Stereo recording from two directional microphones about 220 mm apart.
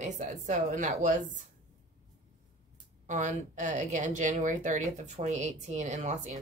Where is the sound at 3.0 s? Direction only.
35° right (ahead or behind).